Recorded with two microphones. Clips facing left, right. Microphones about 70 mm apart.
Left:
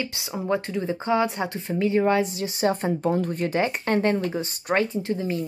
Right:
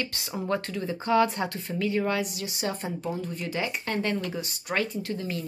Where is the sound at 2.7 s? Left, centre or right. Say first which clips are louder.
Left 8 dB; left.